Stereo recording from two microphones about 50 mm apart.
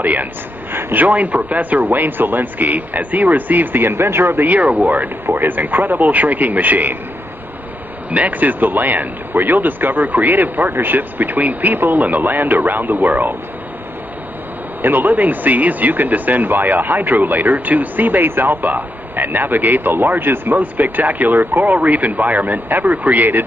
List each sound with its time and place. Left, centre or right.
0.0 s speech: right
0.7 s a sound: right
1.0 s speech: right
8.1 s speech: right
14.8 s speech: right